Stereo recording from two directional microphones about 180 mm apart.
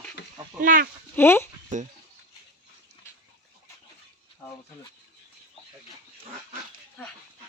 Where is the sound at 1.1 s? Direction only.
15° left (ahead or behind).